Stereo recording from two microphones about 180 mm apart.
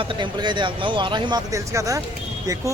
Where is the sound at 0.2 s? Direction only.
25° right (ahead or behind).